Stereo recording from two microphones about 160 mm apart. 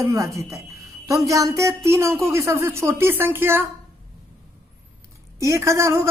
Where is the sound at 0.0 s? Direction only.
20° right (ahead or behind).